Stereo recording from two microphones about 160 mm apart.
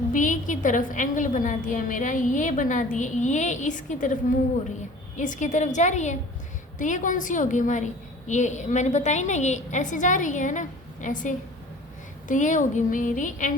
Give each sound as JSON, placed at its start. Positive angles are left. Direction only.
{"t": 0.1, "sound": "a woman's voice", "side_deg": 55}